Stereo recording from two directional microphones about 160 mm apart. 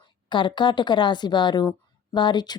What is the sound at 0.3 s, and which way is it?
Speech, 30° left (ahead or behind).